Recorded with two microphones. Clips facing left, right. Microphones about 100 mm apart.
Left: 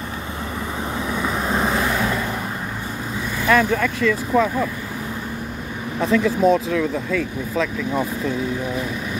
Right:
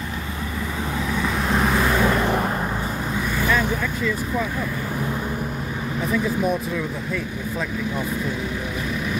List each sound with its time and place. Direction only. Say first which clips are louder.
3.4 s speech: left 7 dB; 75° left (ahead or behind)
5.9 s speech: left 5 dB; 85° left